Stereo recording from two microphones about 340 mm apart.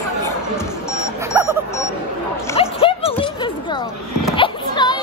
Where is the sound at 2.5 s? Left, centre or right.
Centre.